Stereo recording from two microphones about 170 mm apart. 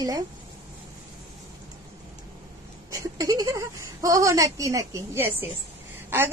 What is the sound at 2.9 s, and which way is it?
Speech, 20° right (ahead or behind).